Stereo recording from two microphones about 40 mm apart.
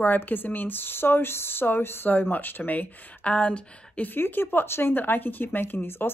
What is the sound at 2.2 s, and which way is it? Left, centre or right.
Speech, left.